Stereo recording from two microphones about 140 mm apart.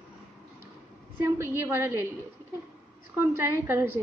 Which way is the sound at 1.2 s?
20° right (ahead or behind).